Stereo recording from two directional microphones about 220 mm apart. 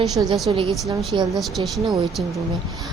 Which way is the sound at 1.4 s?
Centre (ahead or behind).